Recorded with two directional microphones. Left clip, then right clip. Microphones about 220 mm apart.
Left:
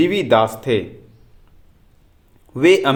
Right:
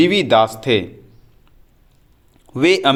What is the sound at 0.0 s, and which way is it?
Speech, 25° right (ahead or behind).